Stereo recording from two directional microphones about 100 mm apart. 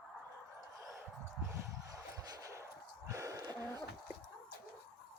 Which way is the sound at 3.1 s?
35° right (ahead or behind).